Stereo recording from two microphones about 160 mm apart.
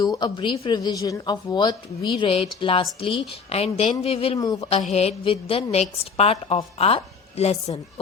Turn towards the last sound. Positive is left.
turn(degrees=40)  # may be behind; listen again after turning